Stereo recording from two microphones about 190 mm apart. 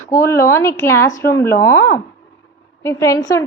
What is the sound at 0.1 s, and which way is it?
A woman's voice, 15° left (ahead or behind).